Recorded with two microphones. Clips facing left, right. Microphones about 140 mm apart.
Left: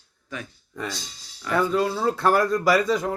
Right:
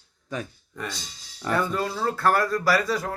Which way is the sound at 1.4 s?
5° left (ahead or behind).